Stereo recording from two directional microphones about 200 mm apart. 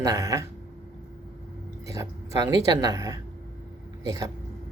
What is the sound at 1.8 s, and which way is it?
Speech, 15° right (ahead or behind).